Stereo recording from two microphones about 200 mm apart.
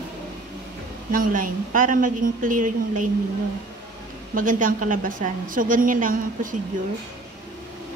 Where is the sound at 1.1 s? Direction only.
45° right (ahead or behind).